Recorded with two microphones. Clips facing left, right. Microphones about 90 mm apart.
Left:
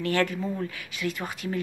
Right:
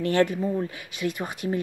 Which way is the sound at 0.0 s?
20° right (ahead or behind).